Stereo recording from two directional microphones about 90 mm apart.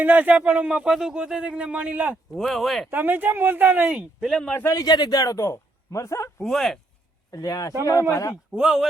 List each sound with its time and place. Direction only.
0.0 s speech: 20° right (ahead or behind)
2.4 s speech: centre (ahead or behind)
2.9 s speech: 20° right (ahead or behind)
4.4 s a man's voice: 10° left (ahead or behind)
4.6 s a man's voice: 40° left (ahead or behind)
6.4 s speech: 5° left (ahead or behind)
7.3 s a man's voice: 45° left (ahead or behind)
8.5 s speech: 5° right (ahead or behind)